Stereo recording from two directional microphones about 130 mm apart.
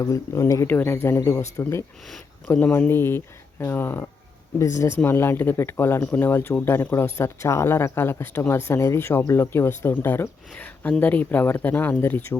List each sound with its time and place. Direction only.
0.0 s speech: 25° left (ahead or behind)